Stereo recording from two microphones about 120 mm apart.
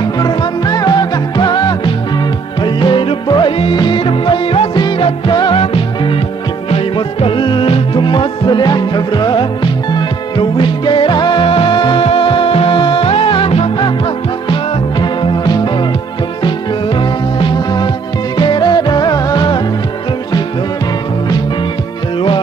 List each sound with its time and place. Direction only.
0.0 s music: 35° left (ahead or behind)
5.6 s music: 50° left (ahead or behind)